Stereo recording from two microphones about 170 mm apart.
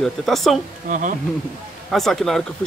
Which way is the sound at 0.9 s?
50° right (ahead or behind).